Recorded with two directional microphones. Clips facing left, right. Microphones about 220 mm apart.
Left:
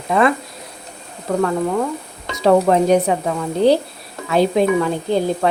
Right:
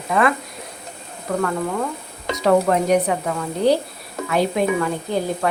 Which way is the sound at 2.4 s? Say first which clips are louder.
Left 3 dB; 30° left (ahead or behind).